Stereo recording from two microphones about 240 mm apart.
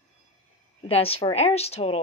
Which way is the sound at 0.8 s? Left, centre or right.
Left.